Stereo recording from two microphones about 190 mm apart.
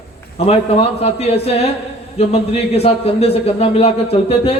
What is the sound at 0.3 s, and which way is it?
Speech, 30° left (ahead or behind).